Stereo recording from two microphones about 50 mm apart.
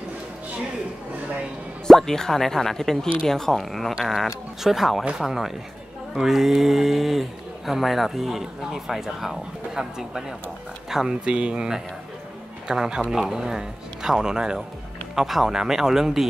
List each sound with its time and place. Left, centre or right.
1.9 s speech: centre
11.2 s speech: centre